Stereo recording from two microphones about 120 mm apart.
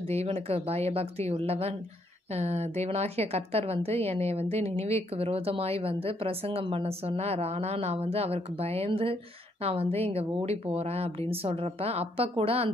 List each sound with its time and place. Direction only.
0.0 s a woman's voice: 60° right (ahead or behind)